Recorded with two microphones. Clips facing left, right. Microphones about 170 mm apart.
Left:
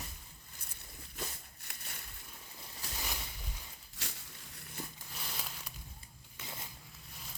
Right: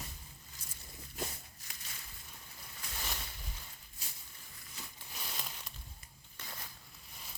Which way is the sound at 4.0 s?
90° left.